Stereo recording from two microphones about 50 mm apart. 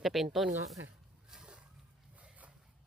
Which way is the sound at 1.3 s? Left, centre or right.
Centre.